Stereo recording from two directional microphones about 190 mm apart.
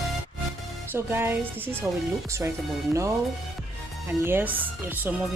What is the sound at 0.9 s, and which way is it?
Speech, 10° right (ahead or behind).